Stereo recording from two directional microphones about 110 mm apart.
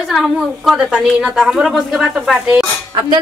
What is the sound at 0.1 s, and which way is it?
A woman's voice, 5° right (ahead or behind).